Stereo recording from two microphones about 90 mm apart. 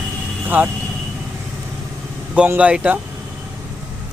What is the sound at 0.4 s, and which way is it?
Speech, 20° right (ahead or behind).